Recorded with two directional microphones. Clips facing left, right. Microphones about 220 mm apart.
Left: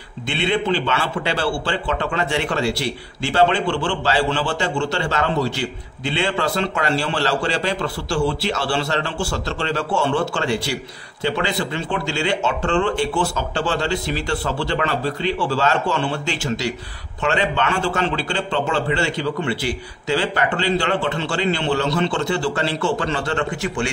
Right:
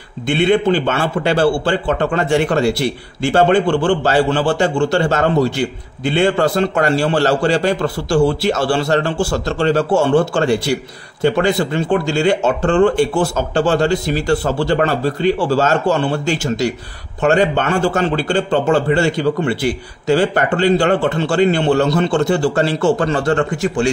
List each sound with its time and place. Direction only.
0.3 s a man's voice: 50° right (ahead or behind)